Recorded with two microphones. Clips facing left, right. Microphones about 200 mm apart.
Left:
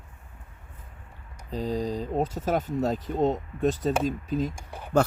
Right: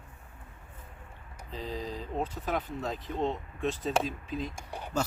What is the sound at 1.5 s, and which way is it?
Speech, 45° left (ahead or behind).